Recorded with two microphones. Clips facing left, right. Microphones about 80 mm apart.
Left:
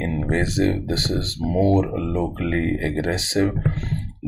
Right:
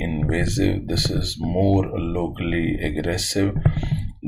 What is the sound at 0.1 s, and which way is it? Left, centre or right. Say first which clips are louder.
Speech: even; left.